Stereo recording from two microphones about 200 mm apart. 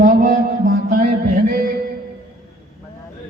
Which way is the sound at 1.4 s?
45° right (ahead or behind).